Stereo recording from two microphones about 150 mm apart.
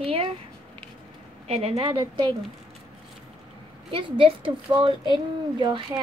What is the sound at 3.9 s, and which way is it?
A woman's voice, 35° right (ahead or behind).